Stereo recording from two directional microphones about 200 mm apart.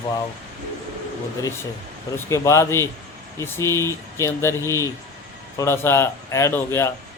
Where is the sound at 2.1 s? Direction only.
15° left (ahead or behind).